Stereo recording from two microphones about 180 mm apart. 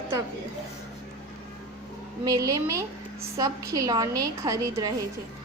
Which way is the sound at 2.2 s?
20° right (ahead or behind).